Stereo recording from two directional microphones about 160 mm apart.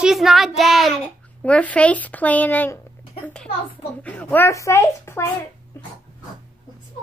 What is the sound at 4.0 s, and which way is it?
Speech, 10° left (ahead or behind).